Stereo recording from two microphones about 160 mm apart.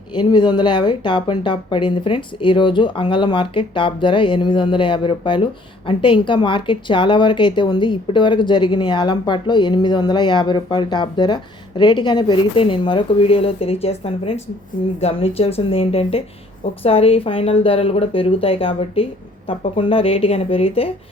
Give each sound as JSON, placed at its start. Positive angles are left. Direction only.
{"t": 0.1, "sound": "speech", "side_deg": 30}